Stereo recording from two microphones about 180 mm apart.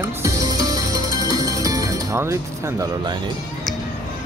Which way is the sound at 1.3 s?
20° right (ahead or behind).